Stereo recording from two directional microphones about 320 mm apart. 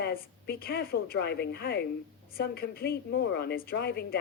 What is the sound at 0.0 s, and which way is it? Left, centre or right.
A woman's voice, left.